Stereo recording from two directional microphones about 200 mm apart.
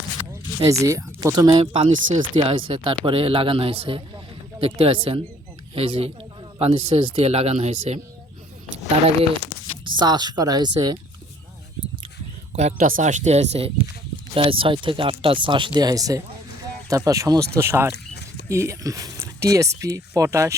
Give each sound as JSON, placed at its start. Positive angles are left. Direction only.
{"t": 0.6, "sound": "speech", "side_deg": -15}
{"t": 9.8, "sound": "speech", "side_deg": -20}
{"t": 12.5, "sound": "speech", "side_deg": -40}